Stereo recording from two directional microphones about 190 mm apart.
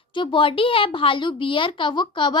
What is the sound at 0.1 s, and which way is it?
A woman's voice, 25° left (ahead or behind).